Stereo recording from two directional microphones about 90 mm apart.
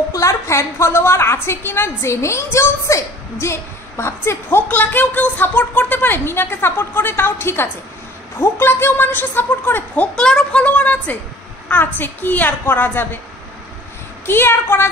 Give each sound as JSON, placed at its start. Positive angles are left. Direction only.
{"t": 0.1, "sound": "a woman's voice", "side_deg": 35}
{"t": 10.1, "sound": "a woman's voice", "side_deg": 10}
{"t": 14.2, "sound": "a woman's voice", "side_deg": 25}